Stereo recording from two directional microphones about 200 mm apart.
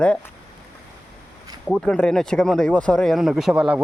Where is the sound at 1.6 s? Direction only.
5° left (ahead or behind).